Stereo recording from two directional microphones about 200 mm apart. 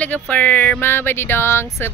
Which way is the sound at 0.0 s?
5° left (ahead or behind).